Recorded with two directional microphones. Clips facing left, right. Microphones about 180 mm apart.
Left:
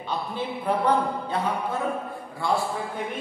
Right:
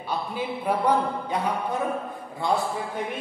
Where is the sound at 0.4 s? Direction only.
10° right (ahead or behind).